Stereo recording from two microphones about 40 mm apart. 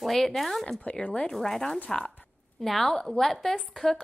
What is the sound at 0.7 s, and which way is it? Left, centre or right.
Speech, left.